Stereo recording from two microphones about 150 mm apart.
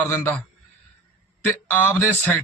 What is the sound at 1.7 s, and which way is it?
Speech, 10° left (ahead or behind).